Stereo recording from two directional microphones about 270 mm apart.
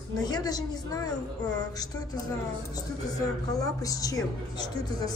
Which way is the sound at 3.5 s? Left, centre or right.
Centre.